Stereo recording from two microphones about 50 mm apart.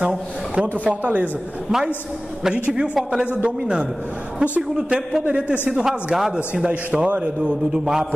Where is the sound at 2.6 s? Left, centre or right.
Centre.